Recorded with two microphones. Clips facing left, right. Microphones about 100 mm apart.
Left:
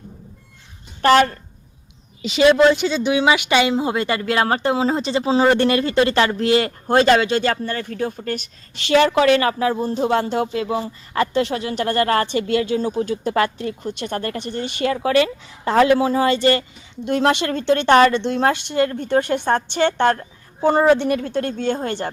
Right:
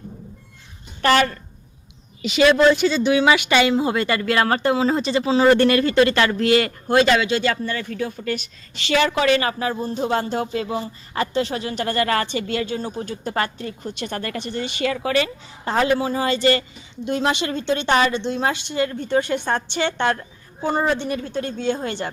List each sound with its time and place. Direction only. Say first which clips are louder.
2.2 s speech: left 1 dB; 25° left (ahead or behind)
6.8 s speech: left 4 dB; 40° left (ahead or behind)
20.6 s a woman's voice: left 6 dB; 75° left (ahead or behind); by 22.1 s 45° left (ahead or behind)